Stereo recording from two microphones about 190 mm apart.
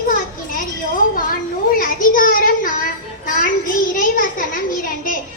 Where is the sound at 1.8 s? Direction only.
50° left (ahead or behind).